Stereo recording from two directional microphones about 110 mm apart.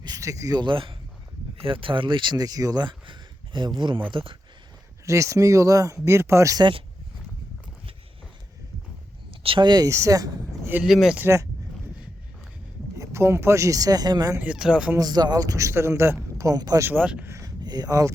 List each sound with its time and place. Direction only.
0.0 s speech: 35° right (ahead or behind); by 4.4 s 50° right (ahead or behind)
5.0 s speech: 25° right (ahead or behind)
6.6 s speech: 50° right (ahead or behind)
9.4 s speech: 55° right (ahead or behind)
9.6 s speech: 35° right (ahead or behind)
10.8 s speech: centre (ahead or behind)
11.2 s speech: 25° right (ahead or behind)
13.0 s speech: 25° right (ahead or behind)
14.3 s speech: 10° right (ahead or behind)
14.9 s speech: 35° right (ahead or behind)
16.4 s speech: 35° right (ahead or behind)
16.8 s speech: 15° right (ahead or behind)
17.2 s a sound: 25° right (ahead or behind)
17.6 s speech: 40° right (ahead or behind)